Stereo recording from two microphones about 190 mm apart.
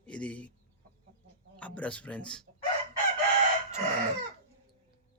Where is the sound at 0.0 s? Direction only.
5° left (ahead or behind).